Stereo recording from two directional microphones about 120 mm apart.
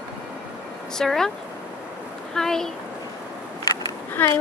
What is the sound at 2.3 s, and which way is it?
Speech, 5° left (ahead or behind).